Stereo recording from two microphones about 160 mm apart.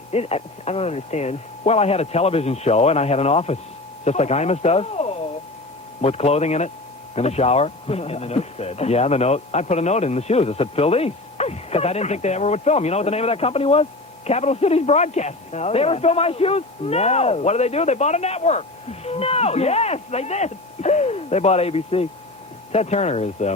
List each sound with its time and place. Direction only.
0.1 s a man's voice: 40° left (ahead or behind)